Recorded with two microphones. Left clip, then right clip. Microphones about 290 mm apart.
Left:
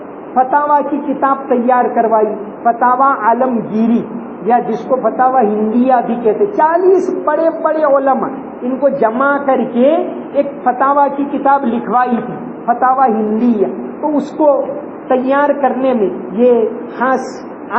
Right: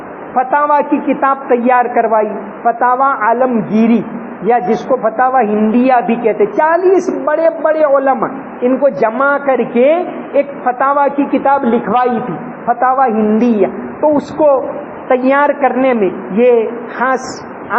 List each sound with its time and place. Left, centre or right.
0.3 s a man's voice: right